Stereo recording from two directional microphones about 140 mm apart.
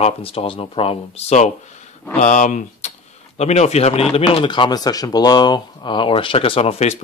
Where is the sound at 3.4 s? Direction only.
50° left (ahead or behind).